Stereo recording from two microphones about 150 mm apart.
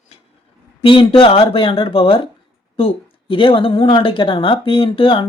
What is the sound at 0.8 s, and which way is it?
A woman's voice, 35° left (ahead or behind).